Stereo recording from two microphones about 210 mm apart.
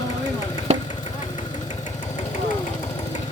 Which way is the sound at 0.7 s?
30° right (ahead or behind).